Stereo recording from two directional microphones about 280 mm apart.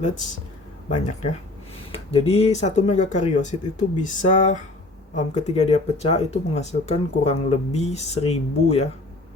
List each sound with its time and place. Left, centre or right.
0.9 s speech: left